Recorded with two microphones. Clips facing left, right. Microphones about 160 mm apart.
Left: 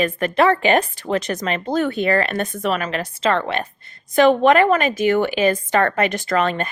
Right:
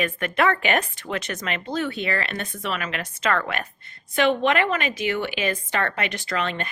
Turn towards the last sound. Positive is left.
turn(degrees=45)  # may be behind; listen again after turning